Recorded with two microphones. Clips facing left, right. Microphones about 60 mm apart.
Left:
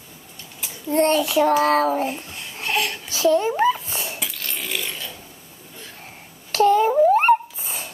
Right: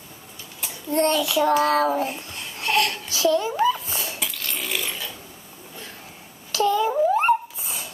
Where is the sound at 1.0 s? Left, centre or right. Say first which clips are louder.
Left 2 dB; left.